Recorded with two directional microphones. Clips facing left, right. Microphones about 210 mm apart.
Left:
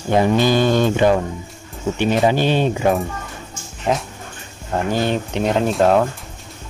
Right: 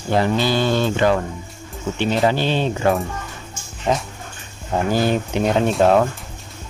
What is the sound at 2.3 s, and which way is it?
Speech, 15° left (ahead or behind).